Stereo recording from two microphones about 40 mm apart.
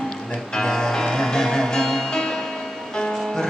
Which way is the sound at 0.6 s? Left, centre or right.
Centre.